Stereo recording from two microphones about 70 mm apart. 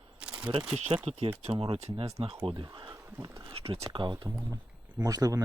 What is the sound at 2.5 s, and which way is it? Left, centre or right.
Speech, right.